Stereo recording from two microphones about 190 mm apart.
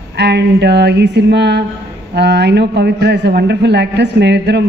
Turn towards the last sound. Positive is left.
turn(degrees=-65)  # may be behind; listen again after turning